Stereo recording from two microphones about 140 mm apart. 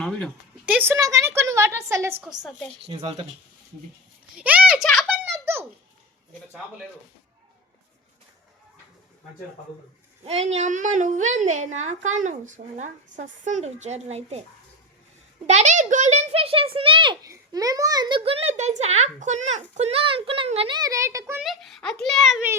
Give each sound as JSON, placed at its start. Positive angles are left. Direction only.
{"t": 0.6, "sound": "a woman's voice", "side_deg": -10}
{"t": 2.4, "sound": "a child's voice", "side_deg": 0}
{"t": 2.8, "sound": "speech", "side_deg": -35}
{"t": 4.4, "sound": "speech", "side_deg": -10}
{"t": 5.2, "sound": "giggle", "side_deg": -15}
{"t": 10.2, "sound": "a woman's voice", "side_deg": -50}
{"t": 15.4, "sound": "a child's voice", "side_deg": -55}
{"t": 17.2, "sound": "a child's voice", "side_deg": -25}
{"t": 20.7, "sound": "a woman's voice", "side_deg": -25}
{"t": 21.4, "sound": "a child's voice", "side_deg": 0}